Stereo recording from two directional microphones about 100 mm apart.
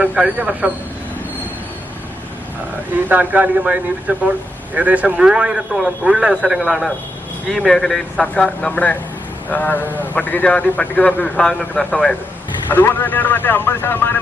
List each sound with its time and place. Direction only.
0.0 s a man's voice: 10° right (ahead or behind)
3.1 s a man's voice: 15° right (ahead or behind); by 12.1 s 5° left (ahead or behind)
12.6 s speech: 20° left (ahead or behind)